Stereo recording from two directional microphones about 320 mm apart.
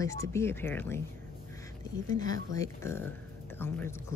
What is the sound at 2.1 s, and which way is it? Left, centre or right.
Speech, centre.